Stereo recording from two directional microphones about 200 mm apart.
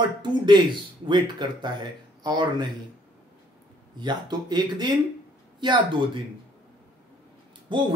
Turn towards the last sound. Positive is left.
turn(degrees=-25)  # may be behind; listen again after turning